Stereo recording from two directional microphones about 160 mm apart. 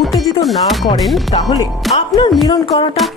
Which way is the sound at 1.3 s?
25° left (ahead or behind).